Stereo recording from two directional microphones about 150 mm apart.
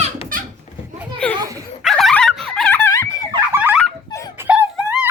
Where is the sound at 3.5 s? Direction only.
10° right (ahead or behind).